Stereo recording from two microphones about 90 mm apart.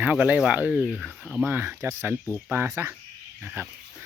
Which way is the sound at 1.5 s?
25° right (ahead or behind).